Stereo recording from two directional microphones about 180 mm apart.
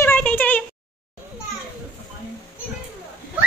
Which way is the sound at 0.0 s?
5° left (ahead or behind).